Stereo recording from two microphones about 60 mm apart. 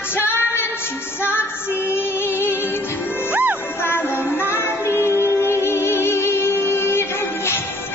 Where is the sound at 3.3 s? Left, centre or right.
Right.